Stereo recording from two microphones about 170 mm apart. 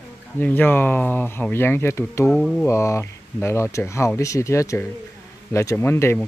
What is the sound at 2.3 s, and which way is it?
Music, centre (ahead or behind).